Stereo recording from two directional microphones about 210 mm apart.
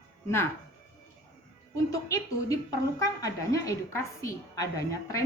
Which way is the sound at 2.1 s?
15° left (ahead or behind).